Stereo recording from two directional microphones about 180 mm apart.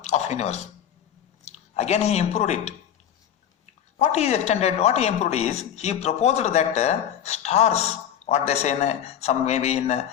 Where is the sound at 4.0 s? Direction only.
40° left (ahead or behind).